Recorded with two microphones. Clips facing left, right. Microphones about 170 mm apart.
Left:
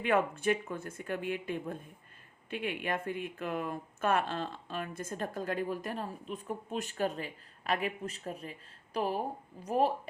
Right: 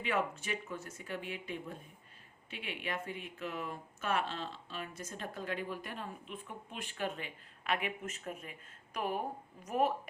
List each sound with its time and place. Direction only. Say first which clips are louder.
0.0 s speech: left 6 dB; 55° left (ahead or behind); by 9.9 s 30° left (ahead or behind)